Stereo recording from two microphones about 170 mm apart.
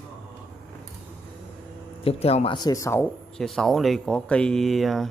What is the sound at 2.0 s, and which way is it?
Speech, 35° left (ahead or behind).